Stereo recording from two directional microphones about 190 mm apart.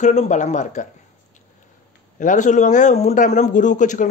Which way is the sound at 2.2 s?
40° left (ahead or behind).